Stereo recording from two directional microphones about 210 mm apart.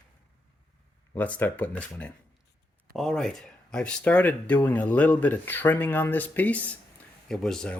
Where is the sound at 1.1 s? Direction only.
10° left (ahead or behind).